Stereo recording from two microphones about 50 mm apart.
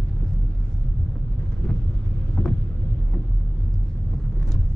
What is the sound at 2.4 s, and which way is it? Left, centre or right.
Vehicle, left.